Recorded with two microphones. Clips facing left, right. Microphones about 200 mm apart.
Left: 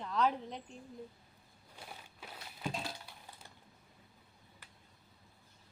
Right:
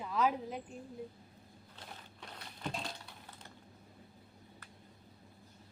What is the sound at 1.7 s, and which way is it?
Crushing, 10° left (ahead or behind).